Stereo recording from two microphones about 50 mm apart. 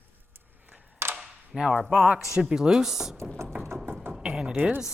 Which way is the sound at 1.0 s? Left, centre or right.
Right.